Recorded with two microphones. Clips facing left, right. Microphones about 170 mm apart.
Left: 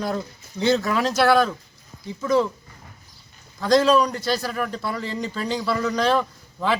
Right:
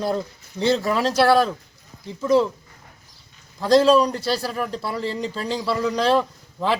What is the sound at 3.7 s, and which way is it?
Speech, 30° right (ahead or behind).